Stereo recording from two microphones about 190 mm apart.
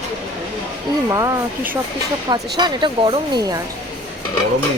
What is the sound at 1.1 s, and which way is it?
Speech, 15° right (ahead or behind).